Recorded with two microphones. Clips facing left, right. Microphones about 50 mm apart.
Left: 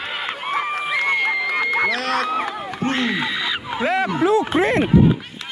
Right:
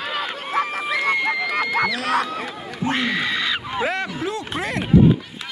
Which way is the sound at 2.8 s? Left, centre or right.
Left.